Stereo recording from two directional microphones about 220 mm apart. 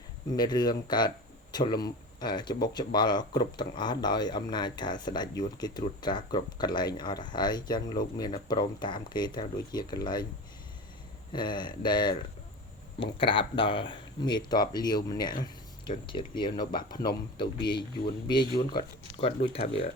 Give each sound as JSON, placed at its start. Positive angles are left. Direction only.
{"t": 0.3, "sound": "speech", "side_deg": 20}
{"t": 11.3, "sound": "speech", "side_deg": 20}